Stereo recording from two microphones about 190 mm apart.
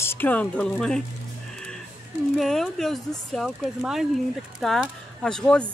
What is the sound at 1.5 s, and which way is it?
Music, 5° left (ahead or behind).